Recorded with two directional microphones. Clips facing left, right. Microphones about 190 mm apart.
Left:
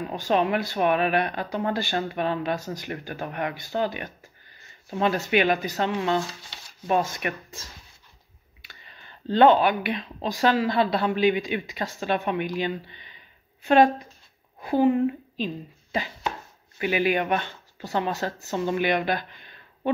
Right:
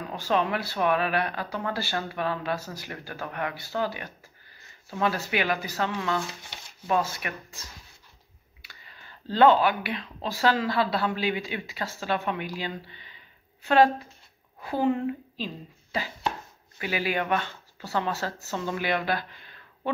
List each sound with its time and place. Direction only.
0.1 s speech: 20° left (ahead or behind)
8.6 s speech: 20° left (ahead or behind)